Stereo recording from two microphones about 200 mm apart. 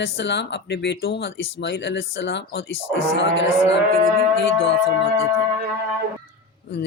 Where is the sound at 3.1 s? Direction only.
70° left (ahead or behind).